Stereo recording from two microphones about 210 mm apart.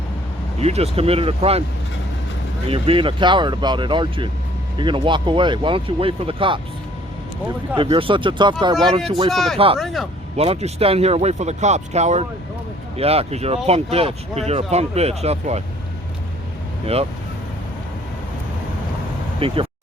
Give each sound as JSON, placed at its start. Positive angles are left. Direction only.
{"t": 0.6, "sound": "speech", "side_deg": -30}
{"t": 2.6, "sound": "speech", "side_deg": -25}
{"t": 7.8, "sound": "speech", "side_deg": -25}
{"t": 9.3, "sound": "speech", "side_deg": 0}
{"t": 10.3, "sound": "speech", "side_deg": -30}
{"t": 16.8, "sound": "speech", "side_deg": -30}
{"t": 19.4, "sound": "speech", "side_deg": -25}